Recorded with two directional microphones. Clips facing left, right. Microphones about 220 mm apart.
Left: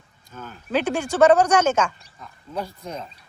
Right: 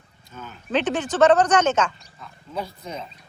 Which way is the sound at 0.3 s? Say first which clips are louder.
Even; 10° left (ahead or behind).